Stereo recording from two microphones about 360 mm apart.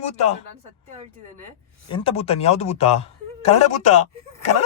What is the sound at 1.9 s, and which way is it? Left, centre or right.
Speech, centre.